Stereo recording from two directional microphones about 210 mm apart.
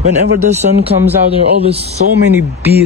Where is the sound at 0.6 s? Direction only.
30° right (ahead or behind).